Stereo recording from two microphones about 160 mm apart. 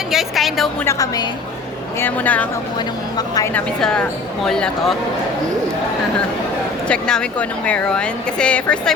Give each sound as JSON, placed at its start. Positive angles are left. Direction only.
{"t": 0.1, "sound": "speech", "side_deg": 0}
{"t": 0.9, "sound": "a woman's voice", "side_deg": 25}
{"t": 2.0, "sound": "speech", "side_deg": 10}
{"t": 3.2, "sound": "a woman's voice", "side_deg": 25}
{"t": 3.5, "sound": "speech", "side_deg": 5}
{"t": 6.8, "sound": "speech", "side_deg": 5}